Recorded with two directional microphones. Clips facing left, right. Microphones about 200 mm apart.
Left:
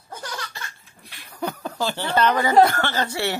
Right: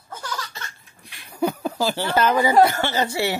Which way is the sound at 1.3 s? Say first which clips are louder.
Right 6 dB; 10° right (ahead or behind).